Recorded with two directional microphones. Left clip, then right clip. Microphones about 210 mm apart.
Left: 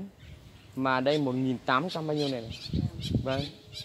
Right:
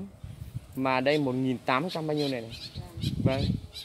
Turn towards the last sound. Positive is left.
turn(degrees=-5)  # may be behind; listen again after turning